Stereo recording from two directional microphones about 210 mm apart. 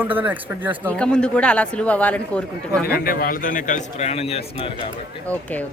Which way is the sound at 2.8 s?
45° left (ahead or behind).